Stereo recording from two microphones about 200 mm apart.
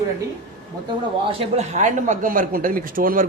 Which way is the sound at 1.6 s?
35° right (ahead or behind).